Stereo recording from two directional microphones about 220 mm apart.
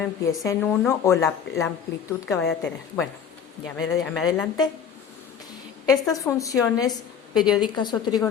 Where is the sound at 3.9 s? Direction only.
5° left (ahead or behind).